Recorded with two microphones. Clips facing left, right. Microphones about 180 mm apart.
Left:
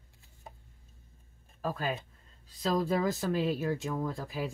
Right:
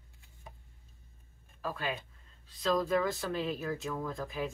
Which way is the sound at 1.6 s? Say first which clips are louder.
Left 3 dB; 40° left (ahead or behind).